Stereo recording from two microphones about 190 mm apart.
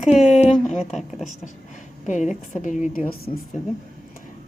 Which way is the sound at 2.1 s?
40° left (ahead or behind).